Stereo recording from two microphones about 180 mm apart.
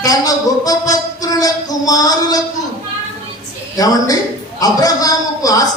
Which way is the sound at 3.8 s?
20° left (ahead or behind).